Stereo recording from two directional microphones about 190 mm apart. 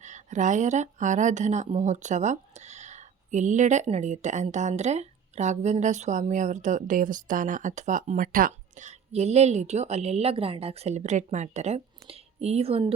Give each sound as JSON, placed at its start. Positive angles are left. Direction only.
{"t": 0.0, "sound": "speech", "side_deg": -40}